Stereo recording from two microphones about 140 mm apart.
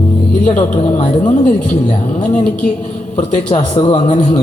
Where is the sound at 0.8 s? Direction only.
55° left (ahead or behind).